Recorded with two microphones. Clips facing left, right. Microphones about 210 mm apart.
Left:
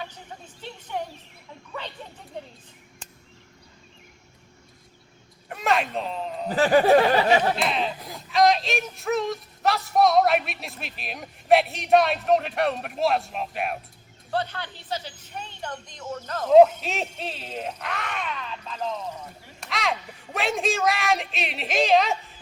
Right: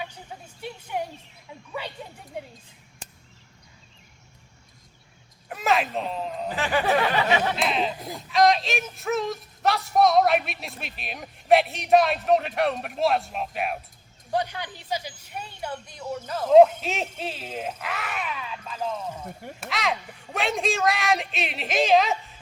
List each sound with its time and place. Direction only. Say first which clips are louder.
0.0 s a sound: right 1 dB; 10° right (ahead or behind)
1.8 s speech: right 1 dB; 10° right (ahead or behind)
5.5 s speech: even; centre (ahead or behind)
6.5 s a sound: left 7 dB; 40° left (ahead or behind)
7.5 s speech: even; centre (ahead or behind)
14.3 s speech: right 1 dB; 15° right (ahead or behind)